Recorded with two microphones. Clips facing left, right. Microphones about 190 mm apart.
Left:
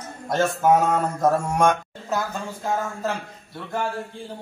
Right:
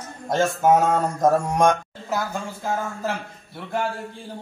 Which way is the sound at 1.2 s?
15° right (ahead or behind).